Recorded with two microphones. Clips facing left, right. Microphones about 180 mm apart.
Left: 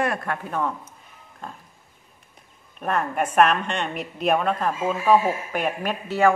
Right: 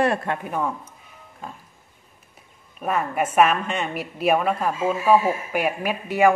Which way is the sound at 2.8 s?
5° right (ahead or behind).